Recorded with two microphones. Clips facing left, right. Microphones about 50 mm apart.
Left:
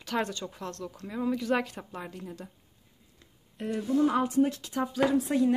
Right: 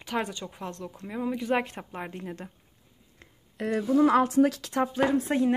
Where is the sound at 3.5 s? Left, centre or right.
Right.